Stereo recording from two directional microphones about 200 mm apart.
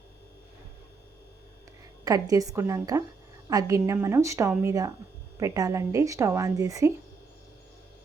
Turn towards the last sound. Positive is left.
turn(degrees=-15)  # may be behind; listen again after turning